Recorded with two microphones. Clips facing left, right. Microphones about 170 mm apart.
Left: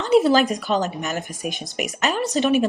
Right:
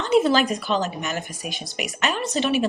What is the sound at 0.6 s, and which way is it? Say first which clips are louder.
A woman's voice: left 2 dB; 45° left (ahead or behind).